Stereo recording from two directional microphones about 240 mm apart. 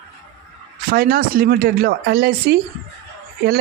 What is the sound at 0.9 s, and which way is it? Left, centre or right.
Speech, right.